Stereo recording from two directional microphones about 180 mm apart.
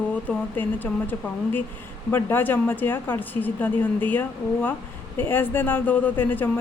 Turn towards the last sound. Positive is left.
turn(degrees=10)  # may be behind; listen again after turning